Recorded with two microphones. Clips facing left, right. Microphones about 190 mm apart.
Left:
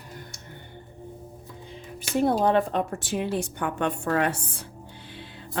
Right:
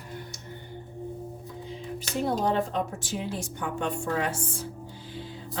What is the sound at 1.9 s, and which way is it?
Speech, 55° left (ahead or behind).